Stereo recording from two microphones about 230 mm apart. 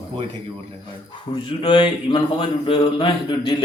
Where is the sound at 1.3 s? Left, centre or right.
Left.